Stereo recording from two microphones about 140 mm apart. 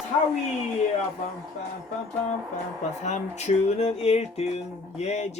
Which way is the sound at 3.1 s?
50° left (ahead or behind).